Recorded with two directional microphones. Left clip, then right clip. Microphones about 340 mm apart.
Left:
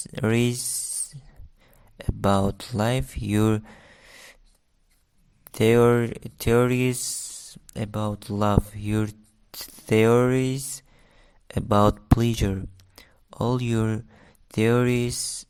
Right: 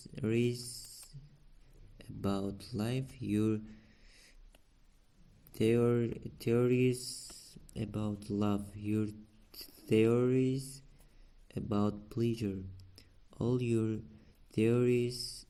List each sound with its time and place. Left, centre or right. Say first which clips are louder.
0.0 s speech: left 10 dB; left
2.0 s speech: left 15 dB; left
5.5 s speech: left 12 dB; left